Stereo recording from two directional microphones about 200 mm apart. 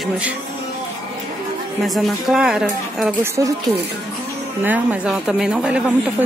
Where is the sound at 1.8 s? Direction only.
Centre (ahead or behind).